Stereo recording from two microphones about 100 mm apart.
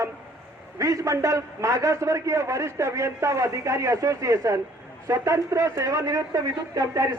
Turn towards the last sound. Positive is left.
turn(degrees=-35)  # may be behind; listen again after turning